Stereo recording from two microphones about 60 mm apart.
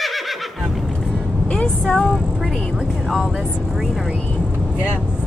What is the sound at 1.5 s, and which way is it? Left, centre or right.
Speech, centre.